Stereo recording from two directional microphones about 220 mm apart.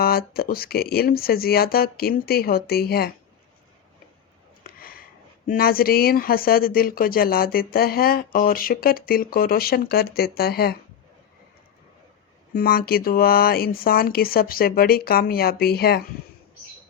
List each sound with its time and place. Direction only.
0.0 s speech: 45° left (ahead or behind)
4.6 s a sound: 40° left (ahead or behind)
5.5 s speech: 40° left (ahead or behind)
12.5 s speech: 45° left (ahead or behind)